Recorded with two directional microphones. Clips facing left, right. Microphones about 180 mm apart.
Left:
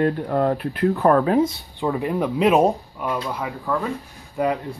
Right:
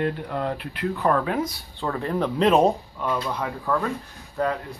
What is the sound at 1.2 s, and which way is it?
Speech, 30° left (ahead or behind).